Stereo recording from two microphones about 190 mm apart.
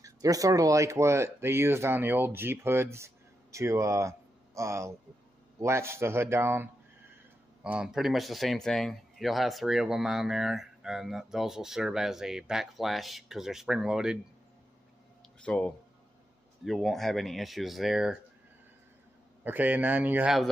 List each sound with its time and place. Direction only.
0.0 s speech: 20° right (ahead or behind)
15.4 s speech: 5° left (ahead or behind)
19.4 s speech: 10° right (ahead or behind)